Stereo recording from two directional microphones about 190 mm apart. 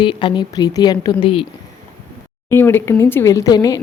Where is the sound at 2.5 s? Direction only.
10° left (ahead or behind).